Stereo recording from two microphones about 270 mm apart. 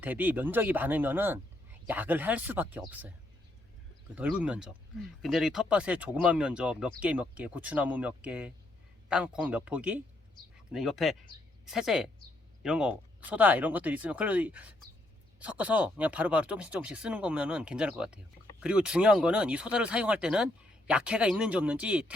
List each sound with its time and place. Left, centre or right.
0.0 s speech: centre
4.1 s speech: centre